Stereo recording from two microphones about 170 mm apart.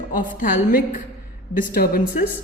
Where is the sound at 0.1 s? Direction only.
55° left (ahead or behind).